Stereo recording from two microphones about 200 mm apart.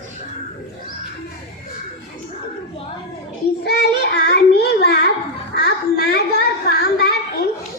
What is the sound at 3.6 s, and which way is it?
Child singing, 55° left (ahead or behind).